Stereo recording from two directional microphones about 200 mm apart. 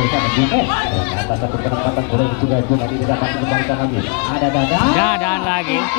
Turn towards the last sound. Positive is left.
turn(degrees=10)  # may be behind; listen again after turning